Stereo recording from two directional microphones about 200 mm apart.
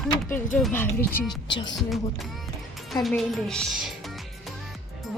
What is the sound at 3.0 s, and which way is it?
Speech, centre (ahead or behind).